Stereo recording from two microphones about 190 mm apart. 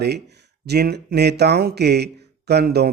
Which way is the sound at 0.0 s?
60° right (ahead or behind).